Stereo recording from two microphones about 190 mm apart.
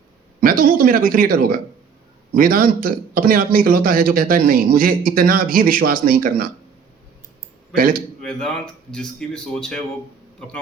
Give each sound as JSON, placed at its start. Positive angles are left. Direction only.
{"t": 0.3, "sound": "a man's voice", "side_deg": -50}
{"t": 7.8, "sound": "a man's voice", "side_deg": -50}
{"t": 8.2, "sound": "speech", "side_deg": 5}